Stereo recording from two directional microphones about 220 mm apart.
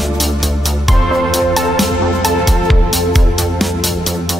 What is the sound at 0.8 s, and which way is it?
Music, centre (ahead or behind).